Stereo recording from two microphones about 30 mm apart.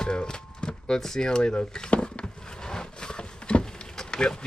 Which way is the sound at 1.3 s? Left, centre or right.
Left.